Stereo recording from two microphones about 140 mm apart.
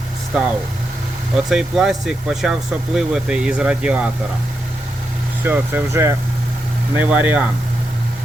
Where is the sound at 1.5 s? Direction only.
5° right (ahead or behind).